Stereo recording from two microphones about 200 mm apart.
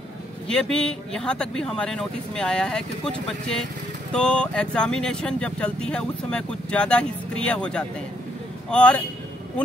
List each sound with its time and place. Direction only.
0.5 s a man's voice: 5° left (ahead or behind)